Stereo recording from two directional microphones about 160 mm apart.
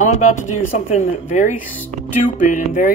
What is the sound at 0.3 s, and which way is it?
Speech, 50° left (ahead or behind).